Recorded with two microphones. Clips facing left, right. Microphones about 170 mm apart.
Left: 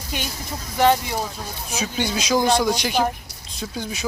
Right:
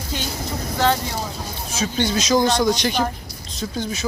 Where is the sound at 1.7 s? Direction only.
10° left (ahead or behind).